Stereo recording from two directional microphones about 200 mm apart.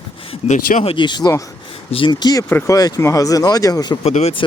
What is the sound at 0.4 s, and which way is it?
Speech, 35° left (ahead or behind).